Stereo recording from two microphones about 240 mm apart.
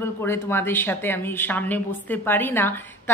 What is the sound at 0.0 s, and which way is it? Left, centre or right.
Speech, centre.